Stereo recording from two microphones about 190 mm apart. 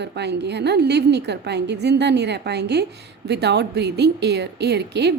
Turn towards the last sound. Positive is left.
turn(degrees=-60)  # may be behind; listen again after turning